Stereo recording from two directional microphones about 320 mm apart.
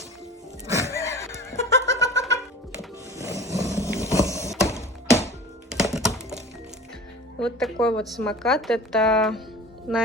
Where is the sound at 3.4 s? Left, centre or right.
Centre.